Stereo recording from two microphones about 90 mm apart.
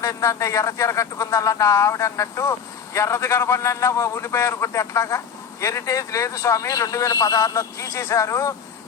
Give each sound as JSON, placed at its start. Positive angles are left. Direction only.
{"t": 0.0, "sound": "speech", "side_deg": 35}